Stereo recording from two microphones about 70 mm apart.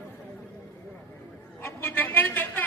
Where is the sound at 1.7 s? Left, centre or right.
Left.